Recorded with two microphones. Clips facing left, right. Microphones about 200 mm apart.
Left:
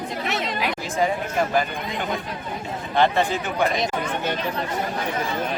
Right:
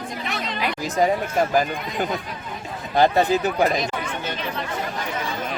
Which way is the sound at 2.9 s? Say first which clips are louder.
Right 3 dB; 40° right (ahead or behind).